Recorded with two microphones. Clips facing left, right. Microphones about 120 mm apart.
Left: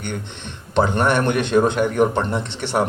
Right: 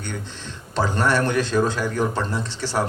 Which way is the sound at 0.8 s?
65° left (ahead or behind).